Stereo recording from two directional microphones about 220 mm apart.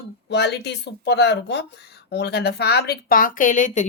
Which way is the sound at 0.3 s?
50° left (ahead or behind).